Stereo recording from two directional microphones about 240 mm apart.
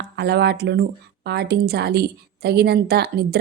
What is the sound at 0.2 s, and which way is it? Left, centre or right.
A woman's voice, right.